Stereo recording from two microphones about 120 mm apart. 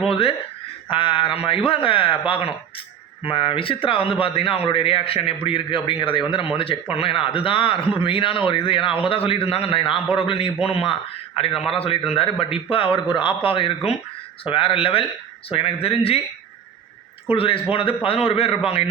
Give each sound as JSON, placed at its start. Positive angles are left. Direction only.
{"t": 0.1, "sound": "a man's voice", "side_deg": 50}
{"t": 11.5, "sound": "a man's voice", "side_deg": 0}
{"t": 12.1, "sound": "a man's voice", "side_deg": 50}
{"t": 17.3, "sound": "a man's voice", "side_deg": 50}